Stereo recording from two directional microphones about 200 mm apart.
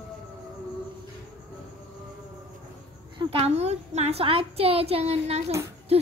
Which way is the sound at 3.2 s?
30° right (ahead or behind).